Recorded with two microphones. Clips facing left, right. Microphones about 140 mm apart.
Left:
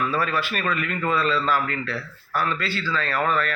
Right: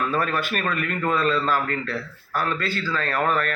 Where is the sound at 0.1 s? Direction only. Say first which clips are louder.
Right 1 dB; 45° right (ahead or behind).